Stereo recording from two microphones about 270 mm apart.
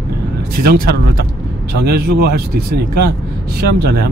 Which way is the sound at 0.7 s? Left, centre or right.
Right.